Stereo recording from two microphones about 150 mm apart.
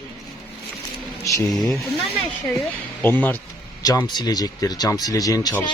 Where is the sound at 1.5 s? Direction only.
5° left (ahead or behind).